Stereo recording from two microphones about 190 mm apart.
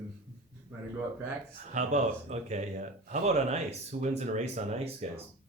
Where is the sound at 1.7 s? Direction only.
35° right (ahead or behind).